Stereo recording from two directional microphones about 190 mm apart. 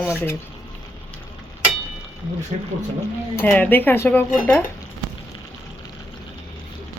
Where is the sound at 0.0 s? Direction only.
15° left (ahead or behind).